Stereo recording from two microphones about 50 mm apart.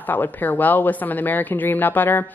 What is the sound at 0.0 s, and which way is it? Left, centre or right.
A woman's voice, left.